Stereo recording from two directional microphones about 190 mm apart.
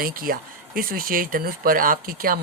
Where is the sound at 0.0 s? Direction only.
50° right (ahead or behind).